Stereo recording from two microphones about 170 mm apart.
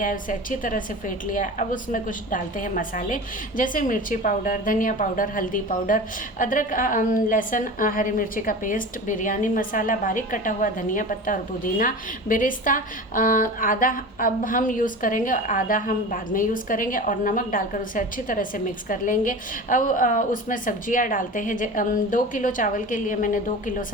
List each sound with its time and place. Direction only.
0.0 s a woman's voice: 50° left (ahead or behind)